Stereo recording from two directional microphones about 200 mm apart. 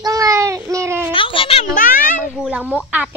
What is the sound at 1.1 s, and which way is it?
Speech, 25° left (ahead or behind).